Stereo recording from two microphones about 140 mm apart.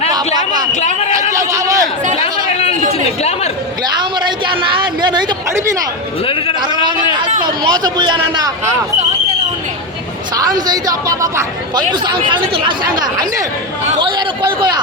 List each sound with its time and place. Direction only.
0.3 s a sound: 30° right (ahead or behind)
0.7 s a man's voice: 55° left (ahead or behind)
1.3 s a sound: 25° right (ahead or behind)
2.5 s chatter: 50° left (ahead or behind)
3.2 s speech: 50° left (ahead or behind)
4.2 s a sound: 35° right (ahead or behind)
7.4 s a man's voice: 30° right (ahead or behind)
10.3 s speech: 25° right (ahead or behind)
12.8 s speech: 90° right
14.0 s speech: 30° right (ahead or behind)